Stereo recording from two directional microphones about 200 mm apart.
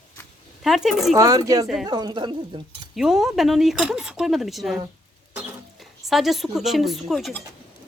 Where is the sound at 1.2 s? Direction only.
15° right (ahead or behind).